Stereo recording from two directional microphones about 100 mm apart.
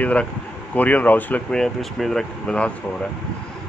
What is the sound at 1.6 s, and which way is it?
Speech, centre (ahead or behind).